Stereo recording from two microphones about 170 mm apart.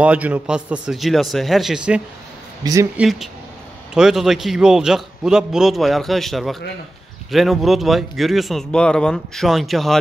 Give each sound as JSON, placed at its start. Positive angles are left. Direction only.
{"t": 0.0, "sound": "a man's voice", "side_deg": -10}
{"t": 2.6, "sound": "speech", "side_deg": -20}
{"t": 3.0, "sound": "a man's voice", "side_deg": 0}